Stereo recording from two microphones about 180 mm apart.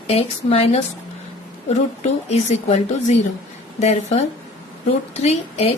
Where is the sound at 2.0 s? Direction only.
40° left (ahead or behind).